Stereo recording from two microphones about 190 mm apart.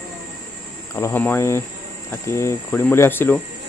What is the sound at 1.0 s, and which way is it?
Cricket, 10° left (ahead or behind).